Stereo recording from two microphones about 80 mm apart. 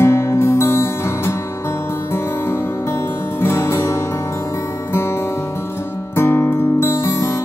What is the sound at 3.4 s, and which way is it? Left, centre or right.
Music, left.